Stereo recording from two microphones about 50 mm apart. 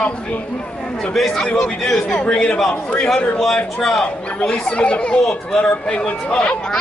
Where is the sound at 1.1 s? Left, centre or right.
Centre; by 3.1 s left.